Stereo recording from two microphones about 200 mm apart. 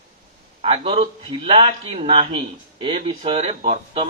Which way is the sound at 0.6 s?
30° right (ahead or behind).